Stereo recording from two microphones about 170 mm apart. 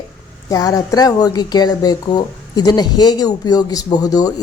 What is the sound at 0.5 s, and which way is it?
Speech, 20° left (ahead or behind).